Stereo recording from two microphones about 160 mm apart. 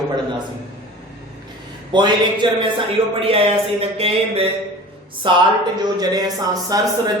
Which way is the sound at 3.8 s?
40° right (ahead or behind).